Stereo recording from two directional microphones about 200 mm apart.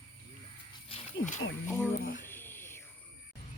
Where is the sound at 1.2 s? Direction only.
45° left (ahead or behind).